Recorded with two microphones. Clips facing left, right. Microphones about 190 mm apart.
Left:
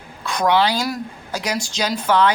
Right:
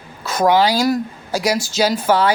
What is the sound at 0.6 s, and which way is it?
Speech, 10° right (ahead or behind).